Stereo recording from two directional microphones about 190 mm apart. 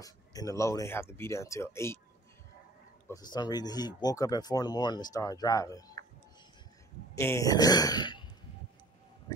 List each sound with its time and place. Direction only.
0.0 s speech: 20° left (ahead or behind)
3.1 s speech: 20° left (ahead or behind)
7.2 s speech: 15° left (ahead or behind)